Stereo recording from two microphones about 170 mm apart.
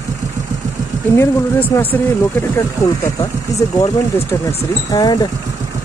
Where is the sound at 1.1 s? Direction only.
10° left (ahead or behind).